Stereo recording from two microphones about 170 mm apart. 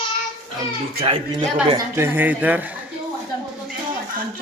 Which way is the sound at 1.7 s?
15° right (ahead or behind).